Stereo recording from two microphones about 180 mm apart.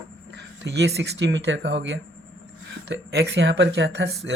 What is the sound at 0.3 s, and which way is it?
Speech, 75° right (ahead or behind).